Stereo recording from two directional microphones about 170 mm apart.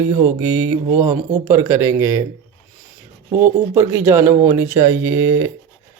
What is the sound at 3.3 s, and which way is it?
Speech, 10° right (ahead or behind).